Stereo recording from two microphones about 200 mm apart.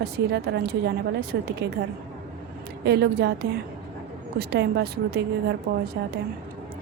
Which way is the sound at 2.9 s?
55° right (ahead or behind).